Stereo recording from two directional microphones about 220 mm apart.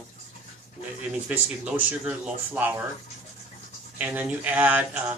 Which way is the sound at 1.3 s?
5° right (ahead or behind).